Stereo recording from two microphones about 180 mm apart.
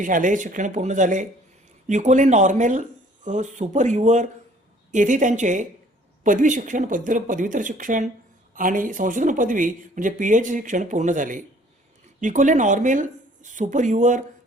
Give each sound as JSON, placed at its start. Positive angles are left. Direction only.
{"t": 0.0, "sound": "speech", "side_deg": -45}